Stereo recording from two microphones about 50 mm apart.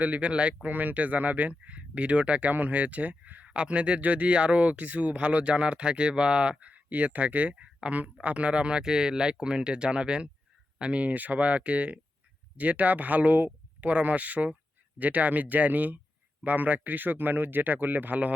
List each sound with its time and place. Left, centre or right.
0.0 s speech: right
3.4 s speech: right